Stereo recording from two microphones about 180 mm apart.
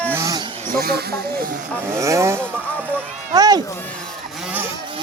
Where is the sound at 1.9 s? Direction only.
15° right (ahead or behind).